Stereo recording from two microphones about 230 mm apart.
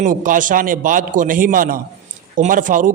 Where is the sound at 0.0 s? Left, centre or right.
Right.